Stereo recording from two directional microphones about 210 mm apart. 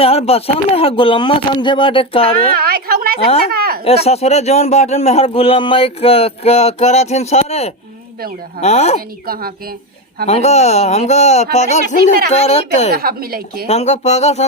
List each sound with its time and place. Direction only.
0.0 s speech: 30° left (ahead or behind)
2.5 s a woman's voice: 45° right (ahead or behind)
3.5 s a sound: 45° right (ahead or behind)
3.8 s a man's voice: 30° left (ahead or behind)
9.2 s a woman's voice: 45° right (ahead or behind)
10.2 s a man's voice: 30° left (ahead or behind)
12.9 s a woman's voice: 45° right (ahead or behind)
13.7 s a man's voice: 30° left (ahead or behind)